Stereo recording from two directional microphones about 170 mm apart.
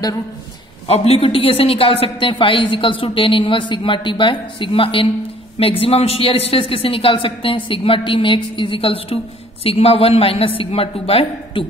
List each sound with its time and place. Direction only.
0.8 s speech: 35° left (ahead or behind)